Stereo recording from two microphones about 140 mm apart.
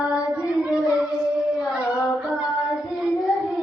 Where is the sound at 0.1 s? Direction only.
5° right (ahead or behind).